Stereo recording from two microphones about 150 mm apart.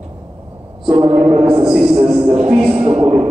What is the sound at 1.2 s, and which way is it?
Speech, 35° right (ahead or behind).